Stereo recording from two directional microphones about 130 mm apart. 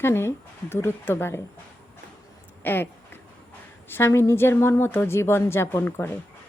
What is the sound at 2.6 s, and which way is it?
A woman's voice, 15° left (ahead or behind).